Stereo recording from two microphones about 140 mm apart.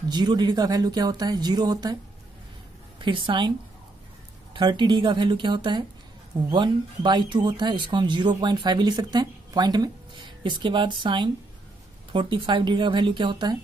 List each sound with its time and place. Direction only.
0.1 s speech: 30° right (ahead or behind)
3.0 s speech: 35° right (ahead or behind)
4.6 s speech: 30° right (ahead or behind)